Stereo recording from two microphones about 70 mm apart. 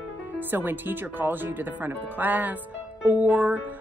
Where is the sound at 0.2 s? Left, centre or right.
Right.